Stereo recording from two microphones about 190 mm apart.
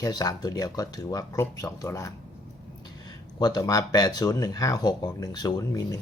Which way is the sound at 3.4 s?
20° left (ahead or behind).